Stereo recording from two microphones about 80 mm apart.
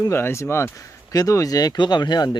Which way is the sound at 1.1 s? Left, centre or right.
Left.